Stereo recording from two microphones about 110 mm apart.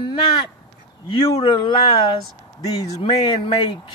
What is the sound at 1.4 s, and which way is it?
Speech, 45° left (ahead or behind).